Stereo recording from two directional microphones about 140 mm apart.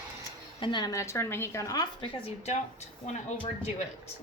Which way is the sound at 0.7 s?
25° left (ahead or behind).